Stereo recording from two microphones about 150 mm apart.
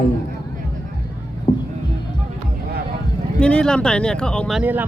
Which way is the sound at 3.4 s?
5° left (ahead or behind).